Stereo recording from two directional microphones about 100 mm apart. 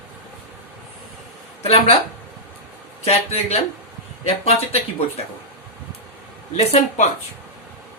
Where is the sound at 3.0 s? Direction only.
90° left.